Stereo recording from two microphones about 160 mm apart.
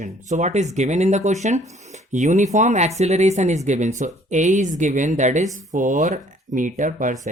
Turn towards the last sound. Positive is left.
turn(degrees=-50)  # may be behind; listen again after turning